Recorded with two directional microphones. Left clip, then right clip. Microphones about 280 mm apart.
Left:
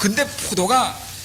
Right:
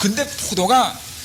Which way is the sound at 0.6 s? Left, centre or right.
Right.